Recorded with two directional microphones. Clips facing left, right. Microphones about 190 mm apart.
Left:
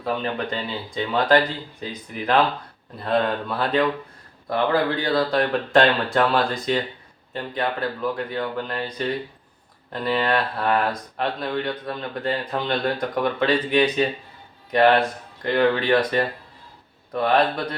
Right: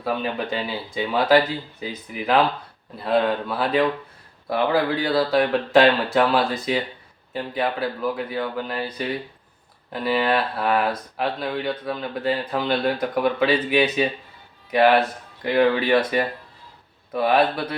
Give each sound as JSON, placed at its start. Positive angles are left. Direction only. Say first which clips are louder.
{"t": 0.0, "sound": "speech", "louder": "even", "side_deg": -5}